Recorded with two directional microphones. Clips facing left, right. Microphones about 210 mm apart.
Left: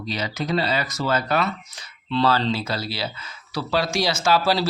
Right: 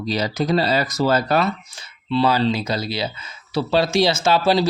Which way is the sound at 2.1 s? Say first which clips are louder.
Right 3 dB; 10° right (ahead or behind).